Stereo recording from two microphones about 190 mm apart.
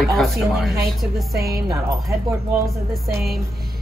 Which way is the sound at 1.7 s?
15° right (ahead or behind).